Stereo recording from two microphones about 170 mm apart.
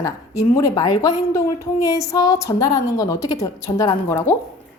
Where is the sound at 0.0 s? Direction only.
20° left (ahead or behind).